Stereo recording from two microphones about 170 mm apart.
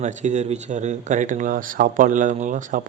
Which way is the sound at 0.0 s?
45° right (ahead or behind).